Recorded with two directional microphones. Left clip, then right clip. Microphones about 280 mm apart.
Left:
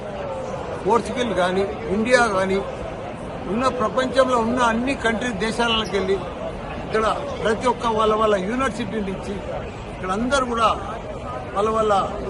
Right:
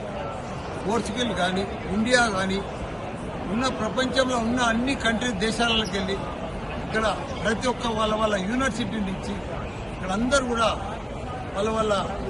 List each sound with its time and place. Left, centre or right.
0.9 s a man's voice: centre
3.6 s a man's voice: centre
10.1 s a man's voice: centre